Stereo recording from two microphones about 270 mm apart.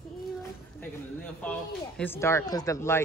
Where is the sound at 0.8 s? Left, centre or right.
Centre.